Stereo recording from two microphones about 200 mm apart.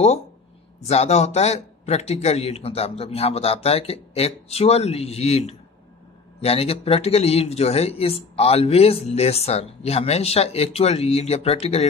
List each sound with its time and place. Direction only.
0.8 s speech: 35° left (ahead or behind)